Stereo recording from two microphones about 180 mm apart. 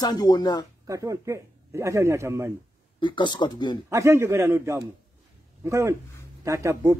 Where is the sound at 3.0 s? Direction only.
25° left (ahead or behind).